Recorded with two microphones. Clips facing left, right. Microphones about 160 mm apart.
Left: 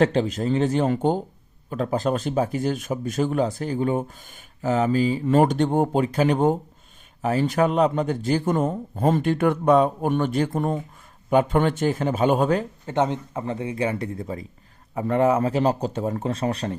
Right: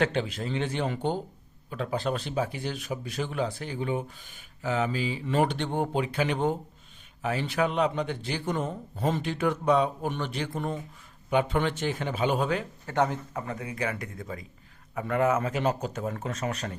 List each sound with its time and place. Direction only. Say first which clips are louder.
0.0 s speech: left 7 dB; 35° left (ahead or behind)
12.8 s speech: left 4 dB; 20° left (ahead or behind)